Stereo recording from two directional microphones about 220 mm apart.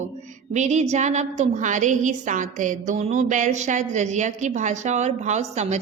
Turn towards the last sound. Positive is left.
turn(degrees=-30)  # may be behind; listen again after turning